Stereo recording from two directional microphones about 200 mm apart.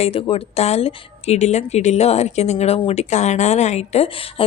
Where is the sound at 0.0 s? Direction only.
30° left (ahead or behind).